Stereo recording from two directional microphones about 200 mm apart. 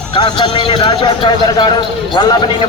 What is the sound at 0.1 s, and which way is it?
A man's voice, 25° left (ahead or behind).